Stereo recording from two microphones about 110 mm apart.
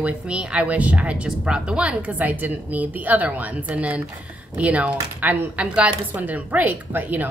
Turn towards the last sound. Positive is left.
turn(degrees=-15)  # may be behind; listen again after turning